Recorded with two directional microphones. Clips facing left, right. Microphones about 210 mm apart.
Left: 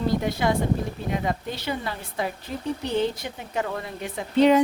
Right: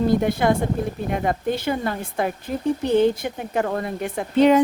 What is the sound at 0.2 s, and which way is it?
A woman's voice, 55° right (ahead or behind).